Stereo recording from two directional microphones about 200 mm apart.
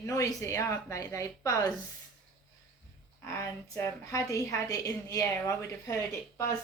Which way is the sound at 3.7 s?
15° left (ahead or behind).